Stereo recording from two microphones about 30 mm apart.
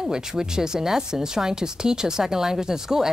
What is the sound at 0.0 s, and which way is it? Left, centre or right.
Speech, right.